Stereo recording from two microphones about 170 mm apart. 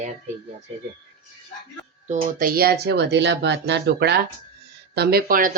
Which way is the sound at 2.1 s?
55° right (ahead or behind).